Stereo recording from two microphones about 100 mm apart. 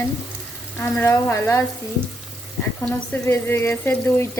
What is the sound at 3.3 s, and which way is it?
Water tap, 25° left (ahead or behind).